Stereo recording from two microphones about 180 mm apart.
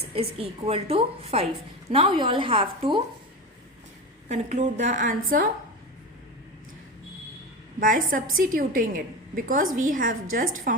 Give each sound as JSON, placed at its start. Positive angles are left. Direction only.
{"t": 0.1, "sound": "a woman's voice", "side_deg": -35}
{"t": 4.3, "sound": "a woman's voice", "side_deg": -40}
{"t": 7.8, "sound": "a woman's voice", "side_deg": -50}